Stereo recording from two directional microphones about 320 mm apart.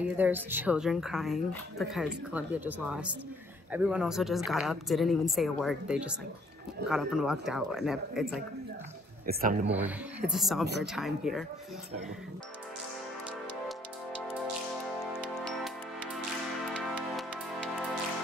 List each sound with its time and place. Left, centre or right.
0.0 s speech: centre
9.2 s a man's voice: right
9.7 s speech: centre
13.7 s music: centre
16.6 s music: centre